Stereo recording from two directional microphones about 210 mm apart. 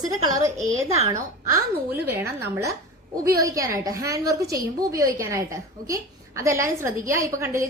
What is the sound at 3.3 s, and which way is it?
A woman's voice, 15° right (ahead or behind).